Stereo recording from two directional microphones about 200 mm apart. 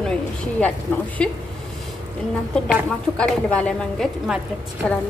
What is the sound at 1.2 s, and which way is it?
Speech, 5° left (ahead or behind).